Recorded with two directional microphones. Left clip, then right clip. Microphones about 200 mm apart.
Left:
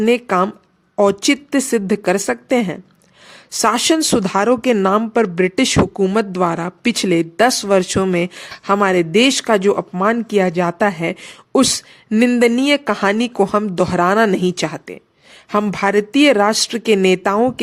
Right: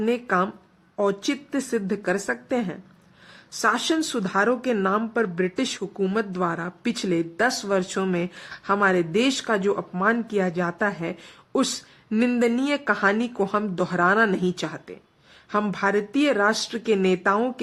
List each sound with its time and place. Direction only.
0.0 s speech: 40° left (ahead or behind)